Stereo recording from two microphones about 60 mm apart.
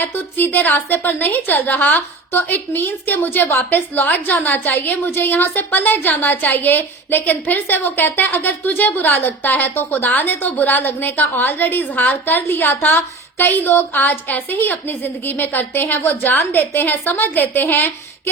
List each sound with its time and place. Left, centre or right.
0.0 s a woman's voice: left